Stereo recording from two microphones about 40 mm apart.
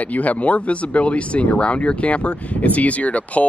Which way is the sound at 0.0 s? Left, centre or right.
Left.